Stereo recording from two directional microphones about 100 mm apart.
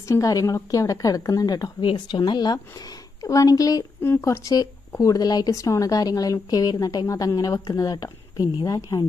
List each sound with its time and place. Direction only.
0.1 s speech: 35° left (ahead or behind)
1.8 s speech: 55° left (ahead or behind); by 3.8 s 35° left (ahead or behind)
4.0 s speech: 25° left (ahead or behind)